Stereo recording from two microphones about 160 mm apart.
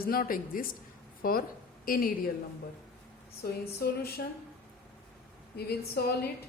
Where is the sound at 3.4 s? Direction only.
75° left (ahead or behind).